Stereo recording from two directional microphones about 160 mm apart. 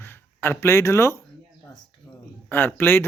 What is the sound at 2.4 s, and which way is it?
Speech, 10° left (ahead or behind).